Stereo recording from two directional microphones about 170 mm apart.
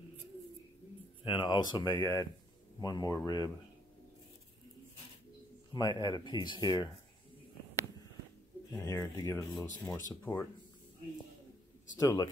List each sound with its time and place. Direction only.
1.2 s speech: 30° left (ahead or behind)
5.7 s speech: 25° left (ahead or behind)
8.8 s speech: 20° left (ahead or behind)
12.0 s speech: 20° left (ahead or behind)